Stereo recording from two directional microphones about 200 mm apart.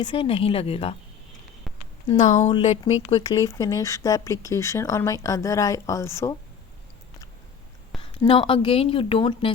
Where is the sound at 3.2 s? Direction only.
20° left (ahead or behind).